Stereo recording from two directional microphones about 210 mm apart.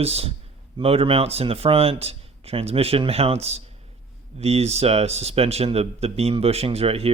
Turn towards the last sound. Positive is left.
turn(degrees=-30)  # may be behind; listen again after turning